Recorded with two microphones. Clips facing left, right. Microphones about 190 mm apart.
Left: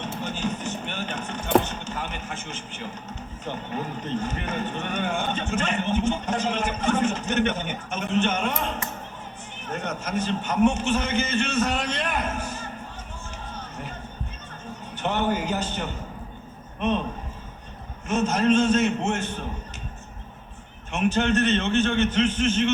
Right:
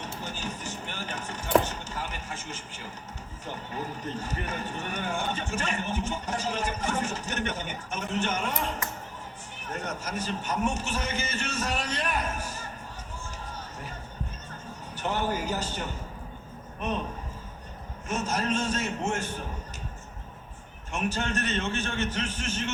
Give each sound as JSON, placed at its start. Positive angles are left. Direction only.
{"t": 0.0, "sound": "chop", "side_deg": 25}
{"t": 1.7, "sound": "a sound", "side_deg": 25}
{"t": 9.6, "sound": "a man's voice", "side_deg": 25}
{"t": 14.9, "sound": "a man's voice", "side_deg": 20}
{"t": 18.1, "sound": "a man's voice", "side_deg": 25}
{"t": 21.2, "sound": "a man's voice", "side_deg": 25}
{"t": 21.7, "sound": "a man's voice", "side_deg": 65}
{"t": 21.9, "sound": "a man's voice", "side_deg": 25}